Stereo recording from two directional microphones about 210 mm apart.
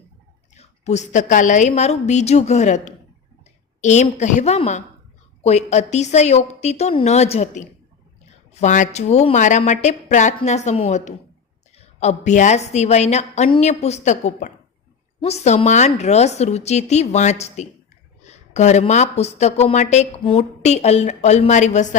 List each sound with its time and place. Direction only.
0.5 s speech: 35° left (ahead or behind)